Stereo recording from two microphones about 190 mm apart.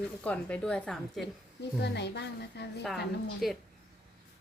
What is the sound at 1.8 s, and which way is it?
Speech, 60° left (ahead or behind).